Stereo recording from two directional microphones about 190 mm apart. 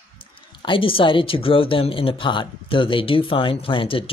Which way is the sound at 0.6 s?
25° left (ahead or behind).